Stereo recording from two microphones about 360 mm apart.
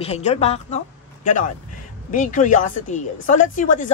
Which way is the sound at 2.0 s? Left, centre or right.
Left.